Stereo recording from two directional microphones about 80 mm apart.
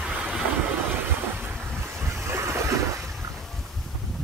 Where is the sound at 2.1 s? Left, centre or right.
Right.